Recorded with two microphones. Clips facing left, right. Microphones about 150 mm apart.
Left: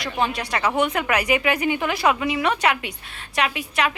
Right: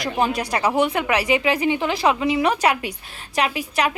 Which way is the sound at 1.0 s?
30° right (ahead or behind).